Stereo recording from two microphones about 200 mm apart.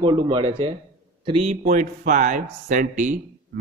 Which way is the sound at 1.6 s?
40° right (ahead or behind).